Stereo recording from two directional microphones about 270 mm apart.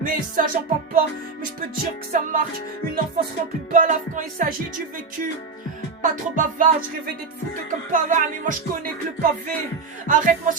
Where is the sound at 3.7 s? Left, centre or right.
Right.